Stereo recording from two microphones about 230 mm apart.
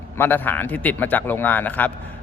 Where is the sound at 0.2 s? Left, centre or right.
Centre.